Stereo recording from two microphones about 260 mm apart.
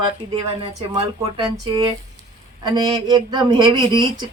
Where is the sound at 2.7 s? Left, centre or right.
Centre.